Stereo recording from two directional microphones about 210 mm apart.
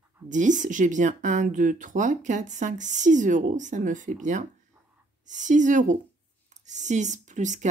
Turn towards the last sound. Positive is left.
turn(degrees=-35)  # may be behind; listen again after turning